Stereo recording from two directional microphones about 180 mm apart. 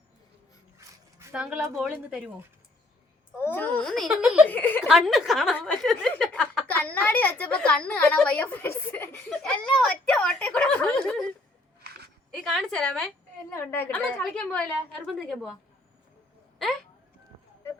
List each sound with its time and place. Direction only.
1.3 s a woman's voice: 5° right (ahead or behind)
3.4 s a woman's voice: 10° left (ahead or behind)
4.4 s chuckle: 10° left (ahead or behind)
4.8 s a woman's voice: centre (ahead or behind)
11.8 s a sound: 60° right (ahead or behind)
12.3 s a woman's voice: centre (ahead or behind)
13.5 s a woman's voice: 15° left (ahead or behind)